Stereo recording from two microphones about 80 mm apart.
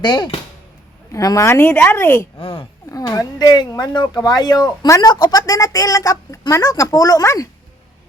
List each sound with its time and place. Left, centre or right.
0.0 s speech: left
1.1 s speech: left
1.5 s speech: left
2.9 s speech: left